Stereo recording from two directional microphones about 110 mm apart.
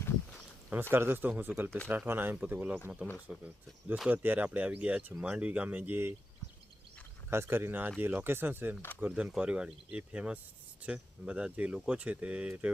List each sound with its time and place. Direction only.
0.7 s speech: 20° right (ahead or behind)
7.3 s speech: 25° right (ahead or behind)